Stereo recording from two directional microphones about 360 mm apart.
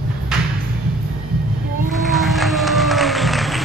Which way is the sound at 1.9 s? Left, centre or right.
Centre.